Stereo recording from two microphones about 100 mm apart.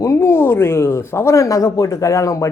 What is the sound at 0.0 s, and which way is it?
A man's voice, 30° left (ahead or behind).